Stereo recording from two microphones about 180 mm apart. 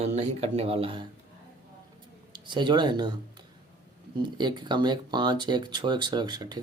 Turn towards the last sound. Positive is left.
turn(degrees=-25)  # may be behind; listen again after turning